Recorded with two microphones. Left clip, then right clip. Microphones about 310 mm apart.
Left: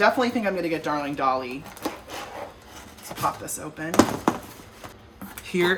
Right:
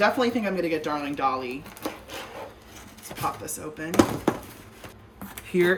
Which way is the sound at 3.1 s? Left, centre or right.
Centre.